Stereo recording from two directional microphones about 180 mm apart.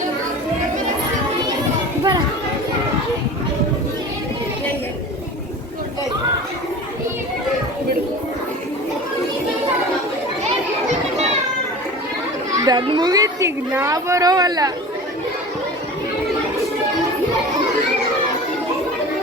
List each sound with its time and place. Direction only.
12.5 s a child's voice: 20° right (ahead or behind)